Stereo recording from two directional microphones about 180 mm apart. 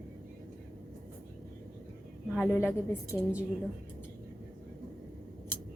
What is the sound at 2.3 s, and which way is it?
Speech, 10° left (ahead or behind).